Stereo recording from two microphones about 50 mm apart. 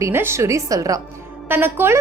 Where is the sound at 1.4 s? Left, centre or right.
Right.